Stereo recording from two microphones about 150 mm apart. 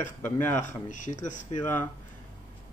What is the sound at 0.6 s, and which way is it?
Speech, 55° left (ahead or behind).